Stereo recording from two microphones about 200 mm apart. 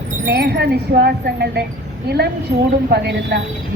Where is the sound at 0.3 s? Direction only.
55° right (ahead or behind).